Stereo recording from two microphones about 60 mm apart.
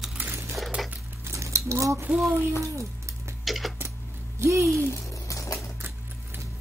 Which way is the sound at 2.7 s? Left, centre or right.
Right.